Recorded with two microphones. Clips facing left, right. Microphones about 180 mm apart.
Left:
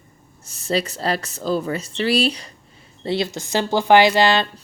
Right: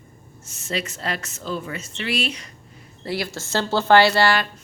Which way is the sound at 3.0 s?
25° left (ahead or behind).